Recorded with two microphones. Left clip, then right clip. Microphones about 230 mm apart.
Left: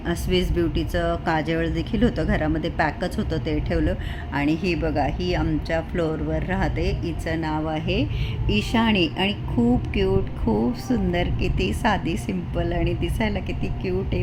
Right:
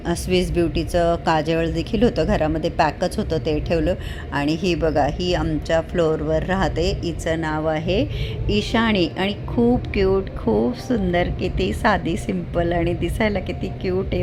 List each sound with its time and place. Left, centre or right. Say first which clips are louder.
0.0 s speech: right 3 dB; centre
10.5 s a woman's voice: right 4 dB; centre
10.8 s speech: right 4 dB; centre
11.3 s a woman's voice: right 3 dB; right
11.7 s a woman's voice: right 5 dB; centre